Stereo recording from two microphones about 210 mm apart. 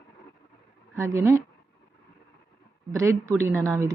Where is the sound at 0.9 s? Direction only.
15° right (ahead or behind).